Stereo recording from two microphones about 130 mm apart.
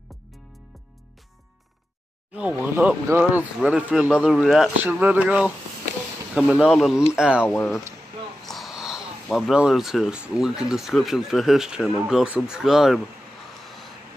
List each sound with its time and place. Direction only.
2.3 s speech: 10° right (ahead or behind)
7.4 s speech: 15° left (ahead or behind)
8.5 s speech: centre (ahead or behind)